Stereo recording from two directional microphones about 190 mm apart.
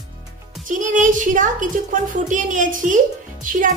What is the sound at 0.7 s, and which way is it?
A woman's voice, 40° right (ahead or behind).